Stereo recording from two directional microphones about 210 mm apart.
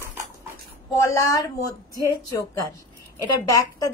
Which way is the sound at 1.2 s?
15° left (ahead or behind).